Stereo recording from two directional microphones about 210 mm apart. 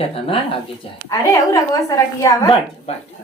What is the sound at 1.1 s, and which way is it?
A woman's voice, 15° left (ahead or behind).